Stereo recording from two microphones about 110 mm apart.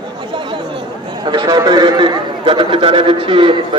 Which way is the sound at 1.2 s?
45° right (ahead or behind).